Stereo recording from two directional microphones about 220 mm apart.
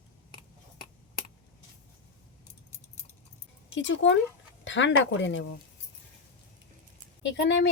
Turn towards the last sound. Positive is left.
turn(degrees=55)  # may be behind; listen again after turning